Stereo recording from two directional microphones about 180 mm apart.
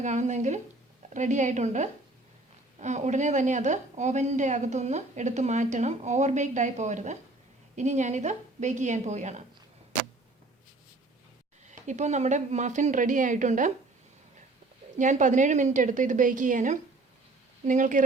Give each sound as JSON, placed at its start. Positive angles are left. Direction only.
{"t": 0.0, "sound": "a woman's voice", "side_deg": -40}
{"t": 11.7, "sound": "a woman's voice", "side_deg": -40}
{"t": 14.9, "sound": "a woman's voice", "side_deg": -45}